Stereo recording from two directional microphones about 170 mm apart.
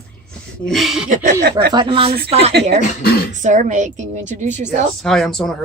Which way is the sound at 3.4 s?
45° right (ahead or behind).